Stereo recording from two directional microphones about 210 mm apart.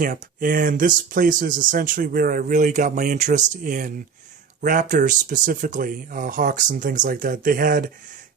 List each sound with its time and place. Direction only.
0.0 s speech: 40° right (ahead or behind)